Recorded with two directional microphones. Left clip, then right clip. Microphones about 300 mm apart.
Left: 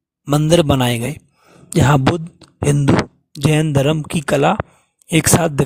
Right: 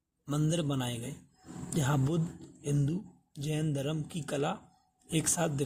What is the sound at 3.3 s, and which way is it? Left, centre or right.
Speech, left.